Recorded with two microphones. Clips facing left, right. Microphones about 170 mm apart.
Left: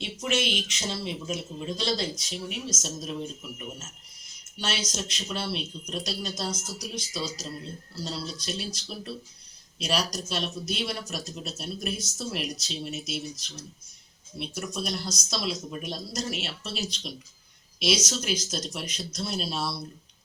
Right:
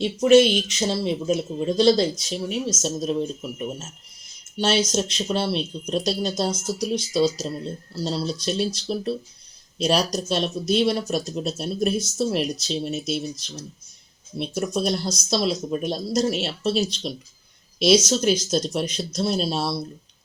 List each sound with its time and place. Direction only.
0.0 s speech: 35° right (ahead or behind)
14.3 s speech: 35° right (ahead or behind)